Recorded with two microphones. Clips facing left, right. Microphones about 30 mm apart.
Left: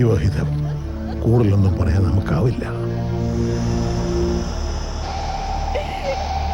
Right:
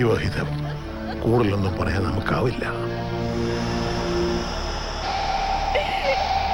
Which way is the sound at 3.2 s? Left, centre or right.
Right.